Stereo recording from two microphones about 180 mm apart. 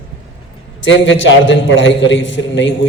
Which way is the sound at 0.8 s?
90° left.